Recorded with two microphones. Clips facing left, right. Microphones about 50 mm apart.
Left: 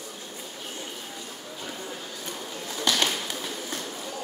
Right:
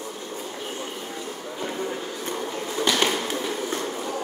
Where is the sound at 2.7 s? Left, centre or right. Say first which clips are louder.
Right 3 dB; right.